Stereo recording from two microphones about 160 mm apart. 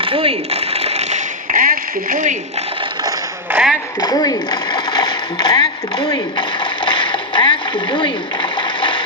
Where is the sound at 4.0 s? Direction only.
25° left (ahead or behind).